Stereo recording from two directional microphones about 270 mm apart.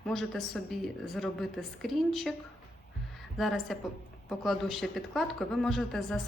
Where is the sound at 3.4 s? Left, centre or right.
Centre.